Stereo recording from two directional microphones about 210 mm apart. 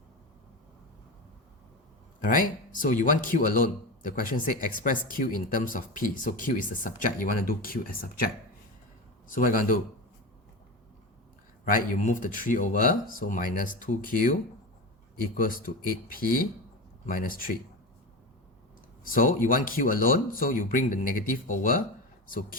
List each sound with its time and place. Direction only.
2.2 s a man's voice: 40° left (ahead or behind)
11.6 s a man's voice: 40° left (ahead or behind)
19.0 s a man's voice: 40° left (ahead or behind)